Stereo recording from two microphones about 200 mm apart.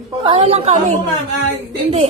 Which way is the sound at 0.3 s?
30° right (ahead or behind).